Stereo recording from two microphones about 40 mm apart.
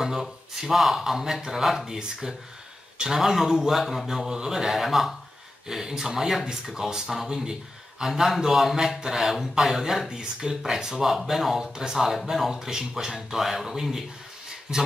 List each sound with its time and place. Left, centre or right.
0.0 s speech: centre
3.8 s speech: centre